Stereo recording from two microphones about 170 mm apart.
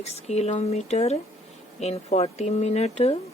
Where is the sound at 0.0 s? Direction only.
40° left (ahead or behind).